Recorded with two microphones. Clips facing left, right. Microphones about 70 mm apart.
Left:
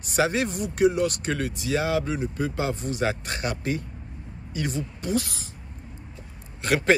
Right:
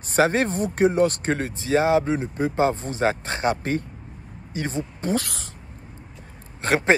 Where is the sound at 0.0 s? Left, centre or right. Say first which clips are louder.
Right 4 dB; right.